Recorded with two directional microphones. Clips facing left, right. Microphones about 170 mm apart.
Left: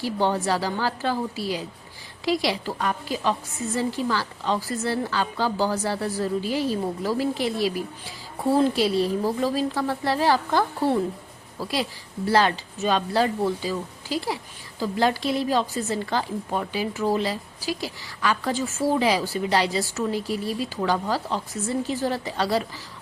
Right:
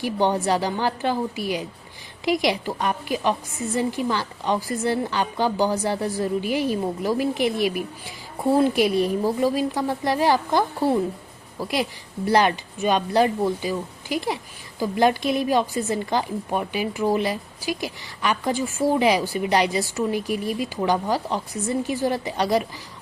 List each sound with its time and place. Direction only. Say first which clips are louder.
0.0 s speech: right 2 dB; 15° right (ahead or behind)